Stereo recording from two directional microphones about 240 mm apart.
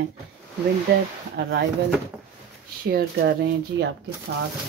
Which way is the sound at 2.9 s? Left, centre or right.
Right.